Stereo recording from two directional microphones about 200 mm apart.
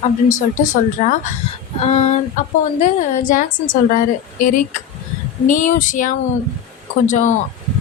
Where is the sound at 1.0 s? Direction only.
35° left (ahead or behind).